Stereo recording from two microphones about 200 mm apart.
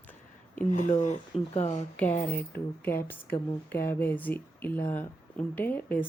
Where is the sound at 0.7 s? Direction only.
35° left (ahead or behind).